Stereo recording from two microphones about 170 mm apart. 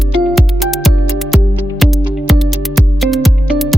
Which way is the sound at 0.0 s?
Centre (ahead or behind).